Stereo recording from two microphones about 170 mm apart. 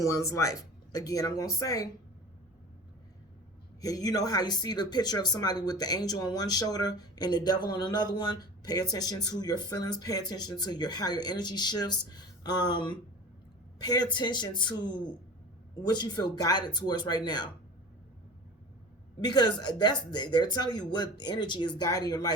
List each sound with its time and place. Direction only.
0.0 s speech: 20° left (ahead or behind)
3.8 s speech: 20° left (ahead or behind)
19.2 s speech: 25° left (ahead or behind)